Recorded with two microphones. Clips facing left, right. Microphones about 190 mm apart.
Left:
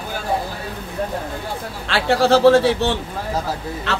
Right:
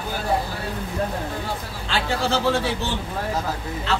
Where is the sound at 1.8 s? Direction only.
70° left (ahead or behind).